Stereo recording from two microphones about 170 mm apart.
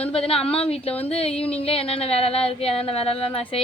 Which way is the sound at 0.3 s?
35° left (ahead or behind).